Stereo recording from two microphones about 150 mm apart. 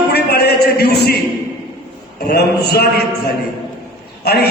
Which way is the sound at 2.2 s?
90° left.